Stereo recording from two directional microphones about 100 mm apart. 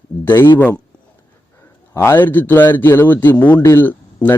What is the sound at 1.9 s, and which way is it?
A man's voice, 25° left (ahead or behind).